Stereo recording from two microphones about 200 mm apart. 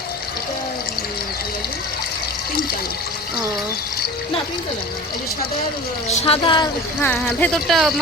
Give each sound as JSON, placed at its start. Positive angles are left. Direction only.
{"t": 6.1, "sound": "a woman's voice", "side_deg": 25}
{"t": 7.0, "sound": "speech", "side_deg": 10}